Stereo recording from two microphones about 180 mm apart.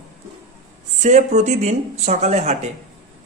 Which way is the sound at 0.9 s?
40° right (ahead or behind).